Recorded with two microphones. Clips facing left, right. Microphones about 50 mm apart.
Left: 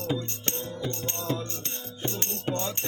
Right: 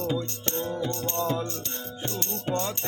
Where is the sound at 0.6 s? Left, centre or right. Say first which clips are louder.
Right 6 dB; right.